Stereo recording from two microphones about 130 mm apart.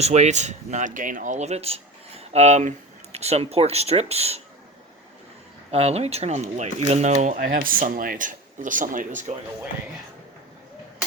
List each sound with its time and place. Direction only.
0.0 s speech: 55° right (ahead or behind)
5.7 s speech: 50° right (ahead or behind); by 9.3 s 85° right